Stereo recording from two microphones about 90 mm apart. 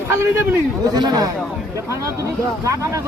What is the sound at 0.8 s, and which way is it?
Speech, 50° right (ahead or behind).